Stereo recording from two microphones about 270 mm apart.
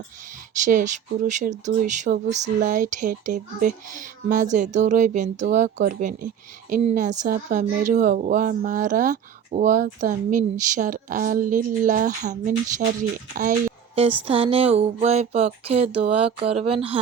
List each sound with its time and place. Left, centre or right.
0.5 s a woman's voice: right
14.3 s a woman's voice: right